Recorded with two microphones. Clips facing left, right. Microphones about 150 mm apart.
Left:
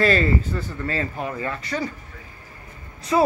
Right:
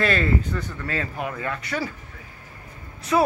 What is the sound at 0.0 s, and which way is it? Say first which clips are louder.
Speech: left 3 dB; centre (ahead or behind).